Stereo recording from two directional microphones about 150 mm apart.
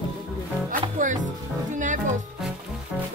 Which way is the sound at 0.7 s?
60° right (ahead or behind).